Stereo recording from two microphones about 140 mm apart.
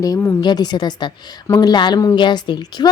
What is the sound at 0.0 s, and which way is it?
A woman's voice, 20° left (ahead or behind).